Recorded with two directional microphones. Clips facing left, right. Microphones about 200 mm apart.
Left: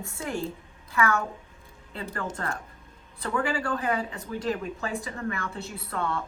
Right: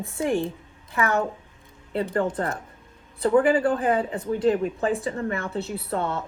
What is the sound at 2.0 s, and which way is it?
Speech, 25° right (ahead or behind).